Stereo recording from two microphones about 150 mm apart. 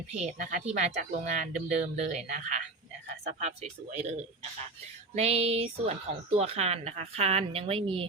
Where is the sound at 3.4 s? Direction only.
45° right (ahead or behind).